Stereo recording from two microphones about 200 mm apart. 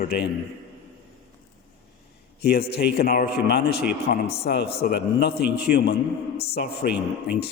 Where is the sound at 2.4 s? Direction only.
50° left (ahead or behind).